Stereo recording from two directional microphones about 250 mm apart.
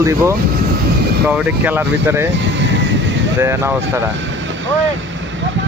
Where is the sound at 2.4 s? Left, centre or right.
Right.